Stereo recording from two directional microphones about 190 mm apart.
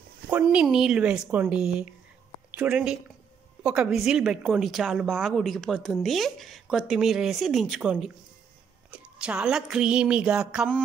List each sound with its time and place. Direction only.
0.3 s a woman's voice: 5° right (ahead or behind)